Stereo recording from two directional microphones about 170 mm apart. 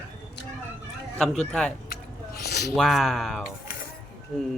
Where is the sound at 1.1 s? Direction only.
5° left (ahead or behind).